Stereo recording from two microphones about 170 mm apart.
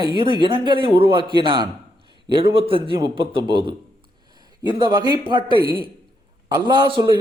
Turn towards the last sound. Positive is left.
turn(degrees=-25)  # may be behind; listen again after turning